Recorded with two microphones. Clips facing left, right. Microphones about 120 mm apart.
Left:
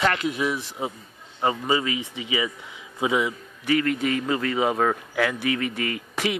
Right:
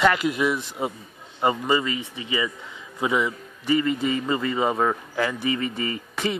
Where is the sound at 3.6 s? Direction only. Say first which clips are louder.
Right 1 dB; 70° left (ahead or behind).